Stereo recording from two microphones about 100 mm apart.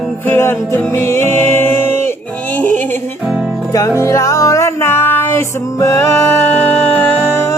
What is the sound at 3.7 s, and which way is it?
Music, 35° left (ahead or behind).